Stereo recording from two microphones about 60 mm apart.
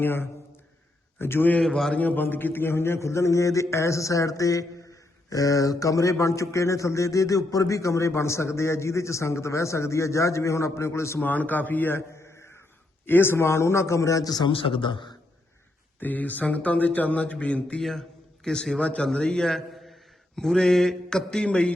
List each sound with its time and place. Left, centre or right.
0.0 s a man's voice: left
1.6 s a man's voice: centre
2.0 s a man's voice: left
11.2 s a man's voice: left
12.1 s a sound: left
13.1 s a man's voice: left
16.0 s speech: left
18.4 s a man's voice: centre